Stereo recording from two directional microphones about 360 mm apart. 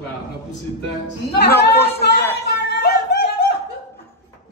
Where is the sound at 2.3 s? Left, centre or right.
Left.